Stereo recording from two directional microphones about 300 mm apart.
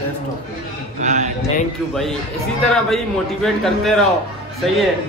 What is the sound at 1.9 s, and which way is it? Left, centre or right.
A man's voice, centre.